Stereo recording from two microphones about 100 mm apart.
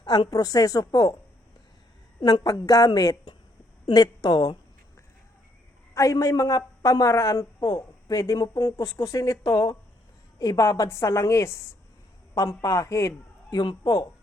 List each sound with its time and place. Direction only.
0.0 s a woman's voice: 45° left (ahead or behind)
2.2 s a woman's voice: 40° left (ahead or behind)
5.9 s a woman's voice: 35° left (ahead or behind)
13.6 s a woman's voice: 45° left (ahead or behind)